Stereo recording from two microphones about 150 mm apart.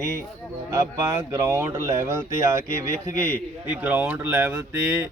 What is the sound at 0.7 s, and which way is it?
Speech, 20° right (ahead or behind).